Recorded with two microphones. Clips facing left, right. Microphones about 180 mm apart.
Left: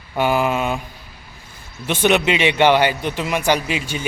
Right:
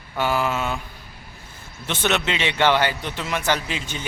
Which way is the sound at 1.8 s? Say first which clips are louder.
Left 7 dB; 15° left (ahead or behind).